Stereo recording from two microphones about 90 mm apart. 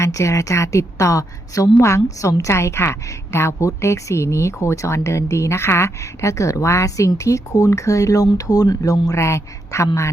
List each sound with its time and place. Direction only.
0.0 s a woman's voice: 35° left (ahead or behind)
9.0 s a woman's voice: 30° left (ahead or behind)